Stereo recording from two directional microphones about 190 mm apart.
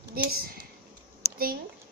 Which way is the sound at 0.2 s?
50° right (ahead or behind).